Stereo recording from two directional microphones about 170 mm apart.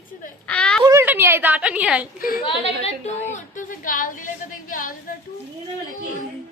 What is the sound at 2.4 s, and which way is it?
Speech, 35° left (ahead or behind).